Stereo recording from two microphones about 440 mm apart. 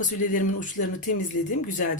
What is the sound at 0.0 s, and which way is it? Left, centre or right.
Speech, centre.